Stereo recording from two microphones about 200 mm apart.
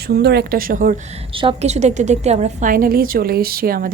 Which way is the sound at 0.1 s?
55° right (ahead or behind).